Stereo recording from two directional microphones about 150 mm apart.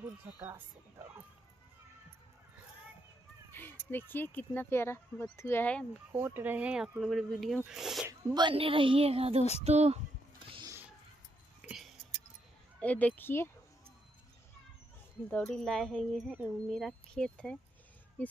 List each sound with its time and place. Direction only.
0.4 s speech: 15° right (ahead or behind)
3.5 s speech: 15° left (ahead or behind)
6.1 s speech: 15° right (ahead or behind)
8.4 s a woman's voice: 35° right (ahead or behind)
9.4 s a sound: 45° left (ahead or behind)
9.7 s speech: 45° right (ahead or behind)
11.6 s a sound: centre (ahead or behind)
12.8 s speech: 10° left (ahead or behind)
15.2 s speech: 5° left (ahead or behind)